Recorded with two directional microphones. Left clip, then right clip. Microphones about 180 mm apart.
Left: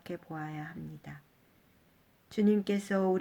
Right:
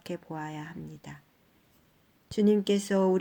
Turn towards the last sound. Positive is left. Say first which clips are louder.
# right 4 dB
turn(degrees=-30)  # may be behind; listen again after turning